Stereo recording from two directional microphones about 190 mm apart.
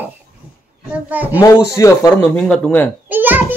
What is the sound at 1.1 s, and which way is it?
Speech, 10° right (ahead or behind).